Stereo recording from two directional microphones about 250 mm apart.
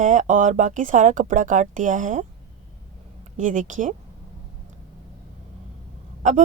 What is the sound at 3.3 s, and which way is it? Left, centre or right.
Speech, right.